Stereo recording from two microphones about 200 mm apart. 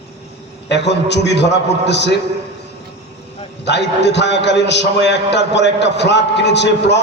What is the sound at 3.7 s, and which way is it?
A man's voice, 60° left (ahead or behind).